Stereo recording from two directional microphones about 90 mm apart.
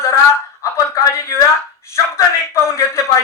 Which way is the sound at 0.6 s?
35° left (ahead or behind).